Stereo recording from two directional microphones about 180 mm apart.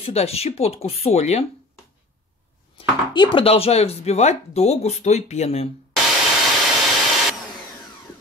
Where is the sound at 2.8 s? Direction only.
30° left (ahead or behind).